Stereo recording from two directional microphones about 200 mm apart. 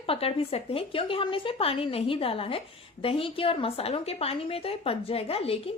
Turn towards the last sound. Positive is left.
turn(degrees=30)  # may be behind; listen again after turning